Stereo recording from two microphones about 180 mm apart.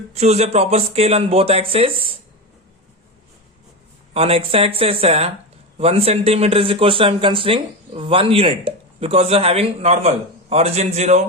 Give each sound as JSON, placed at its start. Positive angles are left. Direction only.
{"t": 0.1, "sound": "a man's voice", "side_deg": -35}
{"t": 4.1, "sound": "a man's voice", "side_deg": -35}